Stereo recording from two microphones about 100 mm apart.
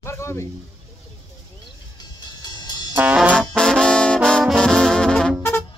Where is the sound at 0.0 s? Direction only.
30° left (ahead or behind).